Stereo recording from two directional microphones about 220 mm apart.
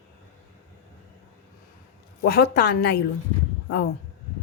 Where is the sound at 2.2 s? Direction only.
45° left (ahead or behind).